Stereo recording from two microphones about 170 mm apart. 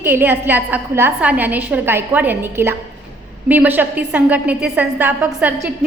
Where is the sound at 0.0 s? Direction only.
10° right (ahead or behind).